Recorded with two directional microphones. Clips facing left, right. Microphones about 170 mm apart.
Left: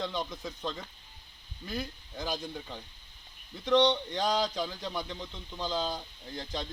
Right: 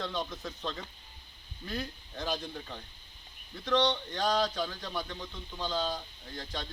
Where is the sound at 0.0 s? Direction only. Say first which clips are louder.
Left 1 dB; 15° left (ahead or behind).